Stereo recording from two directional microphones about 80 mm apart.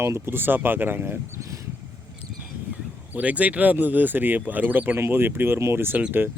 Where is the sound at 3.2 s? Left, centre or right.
Centre.